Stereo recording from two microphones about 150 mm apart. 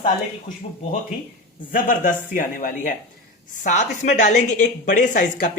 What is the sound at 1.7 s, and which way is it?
A woman's voice, 65° left (ahead or behind).